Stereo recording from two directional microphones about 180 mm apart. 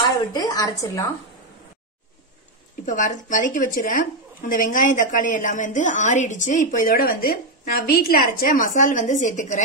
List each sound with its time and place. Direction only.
0.3 s a woman's voice: 20° left (ahead or behind)
2.8 s a woman's voice: 45° left (ahead or behind)